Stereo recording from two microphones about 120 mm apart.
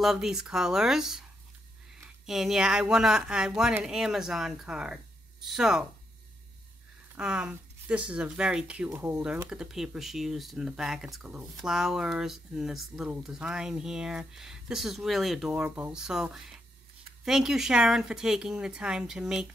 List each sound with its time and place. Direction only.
0.0 s speech: centre (ahead or behind)
2.2 s speech: 5° right (ahead or behind)
7.2 s speech: 5° right (ahead or behind)
8.8 s speech: 20° right (ahead or behind)
9.5 s speech: 5° right (ahead or behind)